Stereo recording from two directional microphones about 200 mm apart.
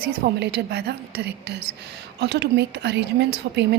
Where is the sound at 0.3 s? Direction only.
55° right (ahead or behind).